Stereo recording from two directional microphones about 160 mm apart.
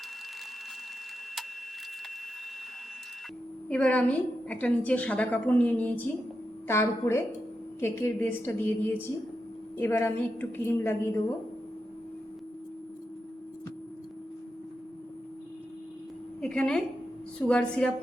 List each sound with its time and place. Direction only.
3.7 s a woman's voice: 5° left (ahead or behind)
16.4 s a woman's voice: 5° left (ahead or behind)